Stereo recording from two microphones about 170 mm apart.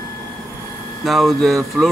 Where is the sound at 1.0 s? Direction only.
Centre (ahead or behind).